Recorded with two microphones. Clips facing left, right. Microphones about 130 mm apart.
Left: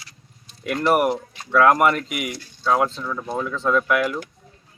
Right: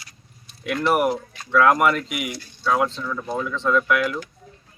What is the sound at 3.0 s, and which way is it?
Speech, 15° left (ahead or behind).